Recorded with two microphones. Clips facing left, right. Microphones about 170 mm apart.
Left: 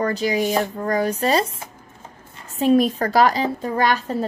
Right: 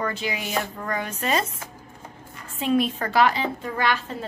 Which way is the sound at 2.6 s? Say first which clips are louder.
Left 6 dB; 40° left (ahead or behind).